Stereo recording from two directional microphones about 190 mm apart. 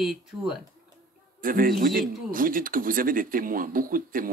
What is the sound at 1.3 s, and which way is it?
A man's voice, 45° right (ahead or behind).